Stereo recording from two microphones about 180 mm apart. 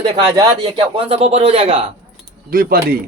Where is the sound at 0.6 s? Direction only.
30° right (ahead or behind).